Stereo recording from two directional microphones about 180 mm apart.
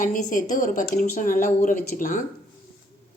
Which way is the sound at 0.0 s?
45° left (ahead or behind).